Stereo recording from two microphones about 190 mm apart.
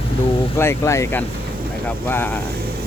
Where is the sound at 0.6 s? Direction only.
15° left (ahead or behind).